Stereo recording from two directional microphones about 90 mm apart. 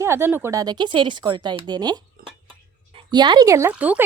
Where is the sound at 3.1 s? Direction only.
55° right (ahead or behind).